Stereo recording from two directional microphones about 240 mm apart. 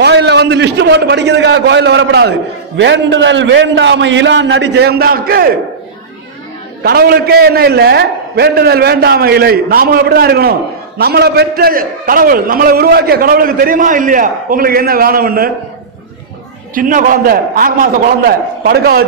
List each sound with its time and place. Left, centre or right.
0.0 s a man's voice: right
6.8 s a man's voice: right
16.7 s a man's voice: right